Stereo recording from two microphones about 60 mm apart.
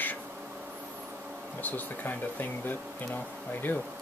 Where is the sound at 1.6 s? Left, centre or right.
Left.